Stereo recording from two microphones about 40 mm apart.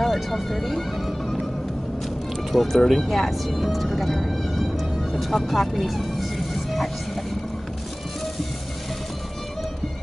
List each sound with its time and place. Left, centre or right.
0.0 s music: centre
2.5 s speech: centre